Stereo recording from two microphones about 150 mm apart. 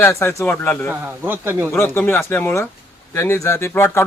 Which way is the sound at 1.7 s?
15° left (ahead or behind).